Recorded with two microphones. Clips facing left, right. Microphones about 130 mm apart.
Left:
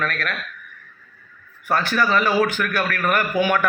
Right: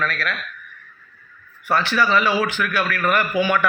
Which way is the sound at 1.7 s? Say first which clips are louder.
Right 1 dB; 45° left (ahead or behind).